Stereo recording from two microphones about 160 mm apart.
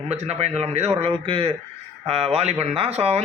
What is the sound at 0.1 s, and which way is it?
A man's voice, 40° right (ahead or behind).